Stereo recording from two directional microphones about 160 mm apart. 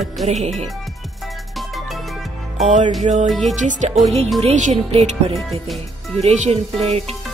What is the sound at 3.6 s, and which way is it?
Speech, 50° right (ahead or behind).